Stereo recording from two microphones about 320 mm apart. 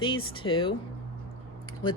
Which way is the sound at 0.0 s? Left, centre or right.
Centre.